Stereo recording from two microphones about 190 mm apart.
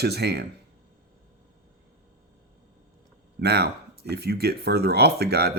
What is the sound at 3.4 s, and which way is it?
Speech, 60° right (ahead or behind).